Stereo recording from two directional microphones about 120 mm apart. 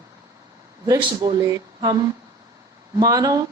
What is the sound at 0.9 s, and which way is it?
A woman's voice, 30° right (ahead or behind).